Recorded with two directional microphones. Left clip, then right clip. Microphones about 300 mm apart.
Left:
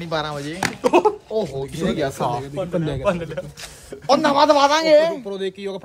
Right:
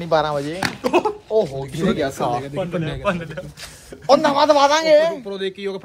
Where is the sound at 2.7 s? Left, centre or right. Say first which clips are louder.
Left 3 dB; left.